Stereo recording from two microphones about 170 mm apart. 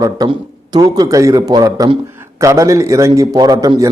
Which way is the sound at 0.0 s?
25° right (ahead or behind).